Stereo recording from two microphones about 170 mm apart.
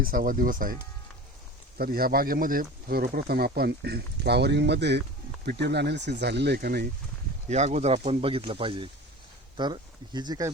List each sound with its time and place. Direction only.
0.0 s speech: 55° right (ahead or behind)
1.8 s speech: 60° right (ahead or behind); by 5.0 s 90° right
5.5 s speech: 75° right (ahead or behind)
7.4 s speech: 40° right (ahead or behind); by 10.5 s 25° right (ahead or behind)